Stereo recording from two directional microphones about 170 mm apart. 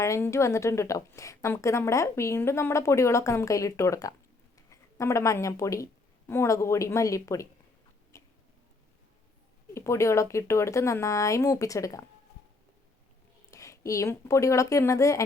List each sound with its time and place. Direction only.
0.0 s a woman's voice: 15° left (ahead or behind)
8.1 s a sound: 20° left (ahead or behind)
9.7 s a woman's voice: 15° left (ahead or behind)
13.5 s speech: 20° left (ahead or behind)